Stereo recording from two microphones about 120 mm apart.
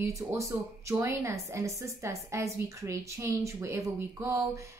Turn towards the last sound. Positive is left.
turn(degrees=-25)  # may be behind; listen again after turning